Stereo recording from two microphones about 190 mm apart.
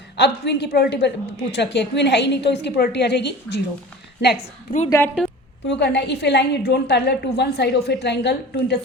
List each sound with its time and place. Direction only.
0.2 s a woman's voice: 60° left (ahead or behind)
4.9 s a woman's voice: 10° left (ahead or behind)
5.6 s a woman's voice: 65° left (ahead or behind)